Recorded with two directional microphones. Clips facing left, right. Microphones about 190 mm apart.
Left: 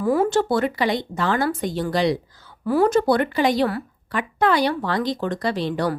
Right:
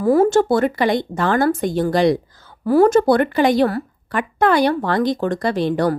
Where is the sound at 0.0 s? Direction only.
40° right (ahead or behind).